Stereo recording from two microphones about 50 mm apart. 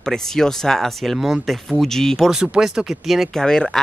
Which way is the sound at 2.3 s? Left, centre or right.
Centre.